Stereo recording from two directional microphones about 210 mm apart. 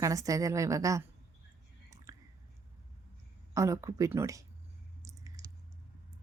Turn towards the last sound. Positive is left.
turn(degrees=-15)  # may be behind; listen again after turning